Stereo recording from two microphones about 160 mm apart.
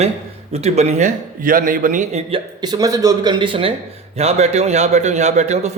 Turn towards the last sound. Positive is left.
turn(degrees=-45)  # may be behind; listen again after turning